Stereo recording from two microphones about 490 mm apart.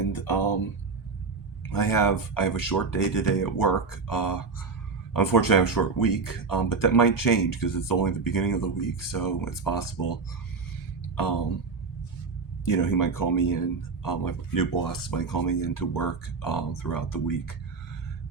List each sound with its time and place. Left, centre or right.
0.1 s music: left
1.7 s speech: left
12.6 s speech: left